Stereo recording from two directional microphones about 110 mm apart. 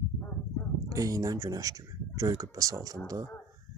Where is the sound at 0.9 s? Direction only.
30° right (ahead or behind).